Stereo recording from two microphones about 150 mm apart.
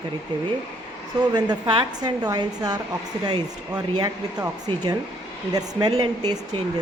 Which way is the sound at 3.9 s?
25° right (ahead or behind).